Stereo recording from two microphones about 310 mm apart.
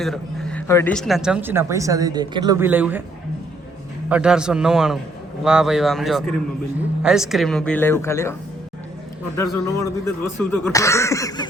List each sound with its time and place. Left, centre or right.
0.0 s speech: centre
4.1 s speech: centre